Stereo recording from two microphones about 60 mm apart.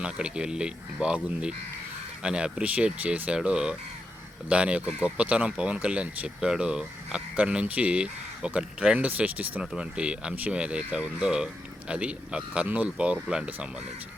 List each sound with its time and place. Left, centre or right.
0.0 s speech: centre